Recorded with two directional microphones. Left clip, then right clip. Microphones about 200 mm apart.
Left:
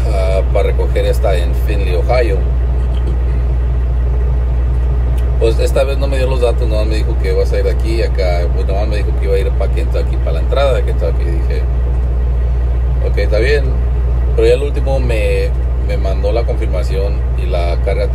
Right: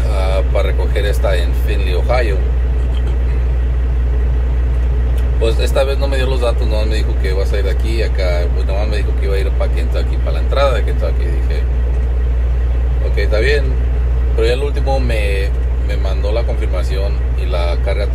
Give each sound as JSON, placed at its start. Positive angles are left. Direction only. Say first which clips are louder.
{"t": 0.1, "sound": "vehicle", "louder": "left 3 dB", "side_deg": 15}
{"t": 5.4, "sound": "speech", "louder": "left 2 dB", "side_deg": 15}
{"t": 13.1, "sound": "speech", "louder": "left 2 dB", "side_deg": 20}
{"t": 17.5, "sound": "speech", "louder": "left 2 dB", "side_deg": 10}